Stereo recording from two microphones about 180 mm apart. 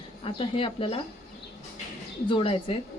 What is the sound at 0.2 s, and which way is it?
Speech, 30° left (ahead or behind).